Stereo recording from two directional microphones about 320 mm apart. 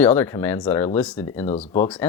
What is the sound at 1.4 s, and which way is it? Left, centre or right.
Speech, centre.